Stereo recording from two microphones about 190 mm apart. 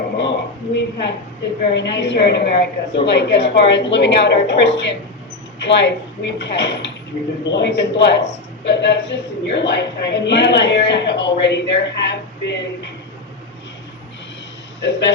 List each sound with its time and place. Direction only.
0.2 s a sound: 65° left (ahead or behind)
1.7 s a woman's voice: 65° left (ahead or behind)
14.8 s a man's voice: 65° left (ahead or behind)